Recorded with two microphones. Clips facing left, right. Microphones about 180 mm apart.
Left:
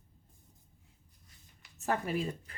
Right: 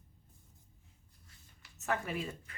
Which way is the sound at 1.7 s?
35° left (ahead or behind).